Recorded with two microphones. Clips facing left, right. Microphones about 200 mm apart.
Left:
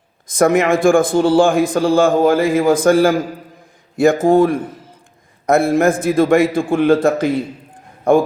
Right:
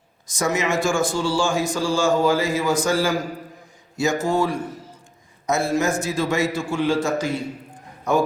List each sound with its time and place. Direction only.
0.3 s a man's voice: 55° left (ahead or behind)